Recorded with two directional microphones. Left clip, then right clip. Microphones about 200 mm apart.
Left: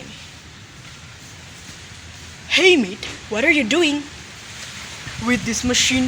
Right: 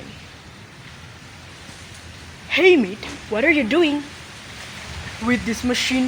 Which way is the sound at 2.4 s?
30° left (ahead or behind).